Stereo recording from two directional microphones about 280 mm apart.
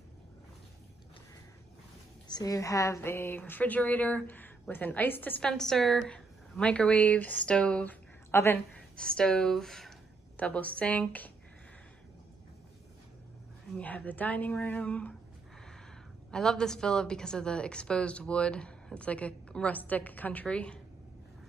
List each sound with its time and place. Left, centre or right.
2.2 s speech: centre
13.7 s a woman's voice: centre
16.3 s a woman's voice: centre